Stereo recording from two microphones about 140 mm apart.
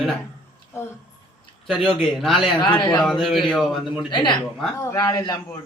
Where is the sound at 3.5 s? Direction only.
Centre (ahead or behind).